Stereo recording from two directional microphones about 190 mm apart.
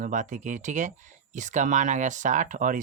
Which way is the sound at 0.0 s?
40° right (ahead or behind).